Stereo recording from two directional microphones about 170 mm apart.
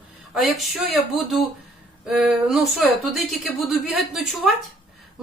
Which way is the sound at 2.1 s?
5° right (ahead or behind).